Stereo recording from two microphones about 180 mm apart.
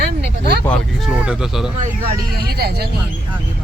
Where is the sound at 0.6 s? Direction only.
5° left (ahead or behind).